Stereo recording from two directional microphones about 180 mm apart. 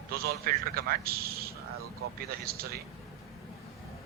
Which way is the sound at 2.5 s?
60° right (ahead or behind).